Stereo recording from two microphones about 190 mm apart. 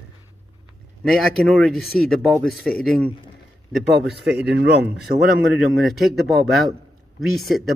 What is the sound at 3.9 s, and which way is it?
Speech, 60° right (ahead or behind).